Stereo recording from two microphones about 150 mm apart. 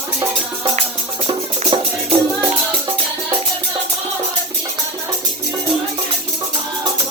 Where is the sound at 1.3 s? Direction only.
35° right (ahead or behind).